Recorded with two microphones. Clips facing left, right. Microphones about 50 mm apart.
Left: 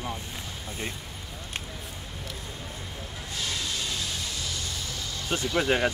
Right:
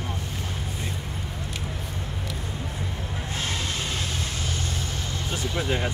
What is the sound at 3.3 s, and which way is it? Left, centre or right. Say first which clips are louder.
Vehicle: right 2 dB; right.